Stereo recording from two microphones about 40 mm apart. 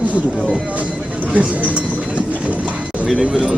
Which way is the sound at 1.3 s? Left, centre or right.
Right.